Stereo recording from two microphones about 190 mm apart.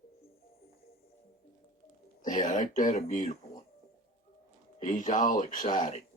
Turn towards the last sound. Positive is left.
turn(degrees=40)  # may be behind; listen again after turning